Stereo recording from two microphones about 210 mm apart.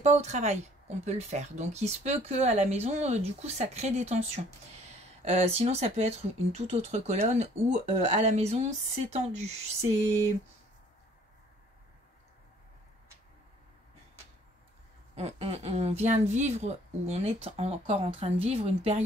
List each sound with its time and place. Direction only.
0.0 s speech: 30° right (ahead or behind)
15.1 s a woman's voice: 30° right (ahead or behind)